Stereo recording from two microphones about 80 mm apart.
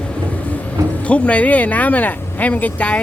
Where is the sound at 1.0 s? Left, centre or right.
Centre.